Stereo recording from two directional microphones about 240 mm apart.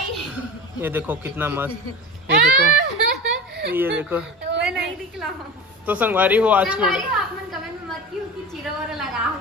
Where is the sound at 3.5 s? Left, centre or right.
Right.